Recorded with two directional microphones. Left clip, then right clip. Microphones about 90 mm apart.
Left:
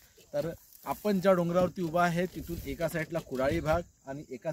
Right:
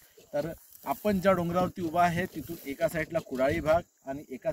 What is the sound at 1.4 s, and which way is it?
Speech, 45° left (ahead or behind).